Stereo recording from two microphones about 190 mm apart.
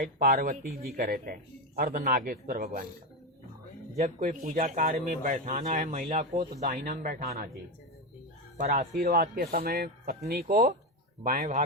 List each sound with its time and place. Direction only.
0.0 s speech: 45° right (ahead or behind)
3.9 s speech: 35° right (ahead or behind)
4.3 s speech: 45° right (ahead or behind)
8.5 s speech: 55° right (ahead or behind)
10.4 s speech: 40° right (ahead or behind)